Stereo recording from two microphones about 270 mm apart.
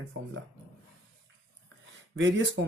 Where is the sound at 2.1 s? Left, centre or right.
Right.